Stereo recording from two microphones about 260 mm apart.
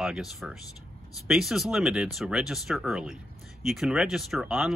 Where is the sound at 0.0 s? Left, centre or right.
Centre.